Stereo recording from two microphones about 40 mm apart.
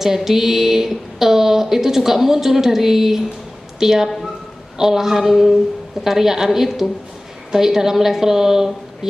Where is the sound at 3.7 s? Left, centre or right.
Centre.